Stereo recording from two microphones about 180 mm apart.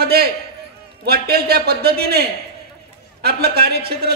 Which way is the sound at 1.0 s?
60° right (ahead or behind).